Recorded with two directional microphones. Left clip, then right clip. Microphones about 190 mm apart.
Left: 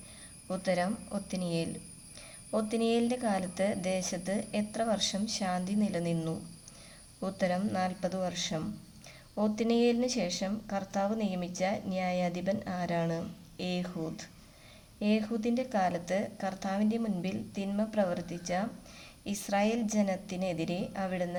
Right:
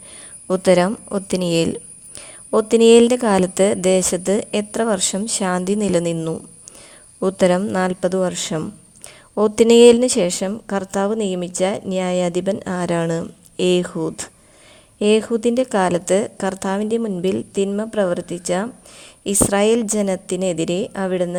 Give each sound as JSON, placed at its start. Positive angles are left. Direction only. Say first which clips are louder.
{"t": 0.4, "sound": "a woman's voice", "louder": "right 16 dB", "side_deg": -55}